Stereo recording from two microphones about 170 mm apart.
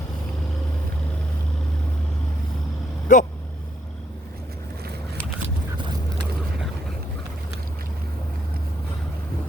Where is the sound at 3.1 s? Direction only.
45° left (ahead or behind).